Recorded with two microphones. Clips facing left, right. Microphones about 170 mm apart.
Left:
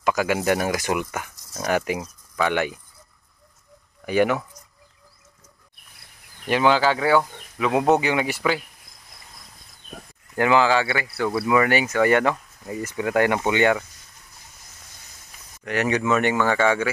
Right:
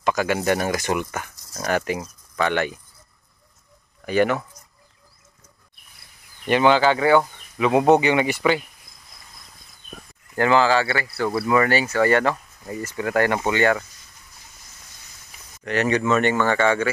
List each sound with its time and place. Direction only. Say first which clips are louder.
0.0 s speech: even; 10° left (ahead or behind)
4.0 s speech: even; 10° left (ahead or behind)
6.4 s speech: right 2 dB; 5° left (ahead or behind)
10.3 s speech: right 1 dB; 10° left (ahead or behind)
11.1 s speech: even; 5° right (ahead or behind)
11.4 s speech: even; 10° left (ahead or behind)
15.6 s speech: right 1 dB; 10° left (ahead or behind)